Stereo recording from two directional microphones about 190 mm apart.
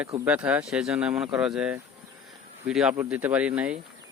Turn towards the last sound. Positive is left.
turn(degrees=-5)  # may be behind; listen again after turning